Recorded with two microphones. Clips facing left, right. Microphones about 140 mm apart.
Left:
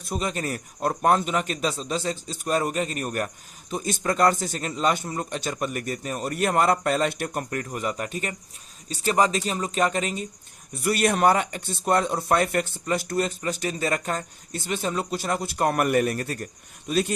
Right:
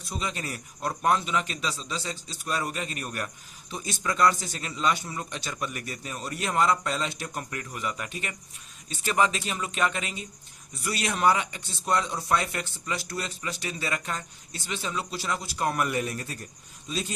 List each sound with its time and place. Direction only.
0.0 s speech: 50° left (ahead or behind)
10.8 s speech: 55° left (ahead or behind)